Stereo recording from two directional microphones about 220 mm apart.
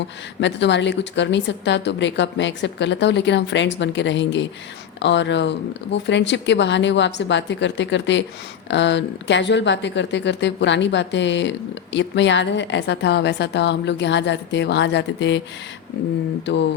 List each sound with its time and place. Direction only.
0.3 s speech: 55° left (ahead or behind)